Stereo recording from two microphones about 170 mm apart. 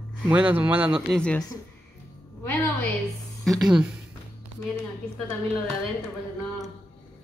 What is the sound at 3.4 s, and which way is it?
Speech, centre (ahead or behind).